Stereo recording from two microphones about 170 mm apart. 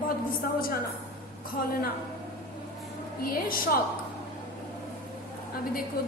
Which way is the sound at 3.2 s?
60° left (ahead or behind).